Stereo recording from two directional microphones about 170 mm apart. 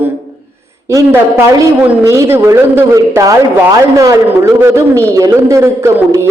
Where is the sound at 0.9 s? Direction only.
15° right (ahead or behind).